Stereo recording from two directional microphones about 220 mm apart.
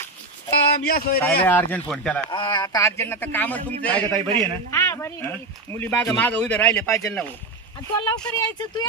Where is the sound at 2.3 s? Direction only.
20° left (ahead or behind).